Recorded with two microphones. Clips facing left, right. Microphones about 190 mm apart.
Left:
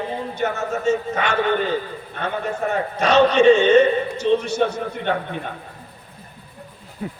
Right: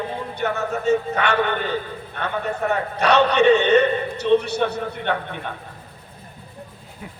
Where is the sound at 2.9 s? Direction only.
65° right (ahead or behind).